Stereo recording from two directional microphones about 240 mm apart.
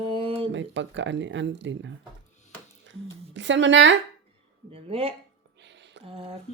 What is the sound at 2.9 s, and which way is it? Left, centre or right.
Speech, right.